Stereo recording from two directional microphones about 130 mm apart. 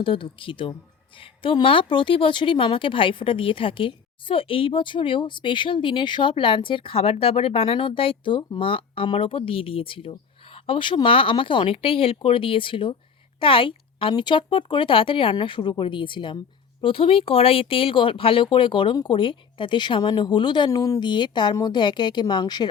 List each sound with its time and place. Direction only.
0.0 s speech: 40° left (ahead or behind)